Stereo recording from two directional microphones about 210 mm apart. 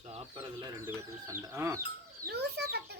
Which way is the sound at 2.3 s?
50° right (ahead or behind).